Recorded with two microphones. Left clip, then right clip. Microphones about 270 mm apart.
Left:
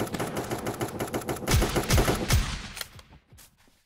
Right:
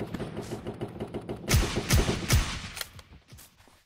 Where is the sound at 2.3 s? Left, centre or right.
Centre.